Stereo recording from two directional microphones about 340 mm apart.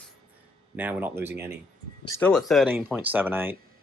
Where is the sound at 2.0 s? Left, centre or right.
Centre.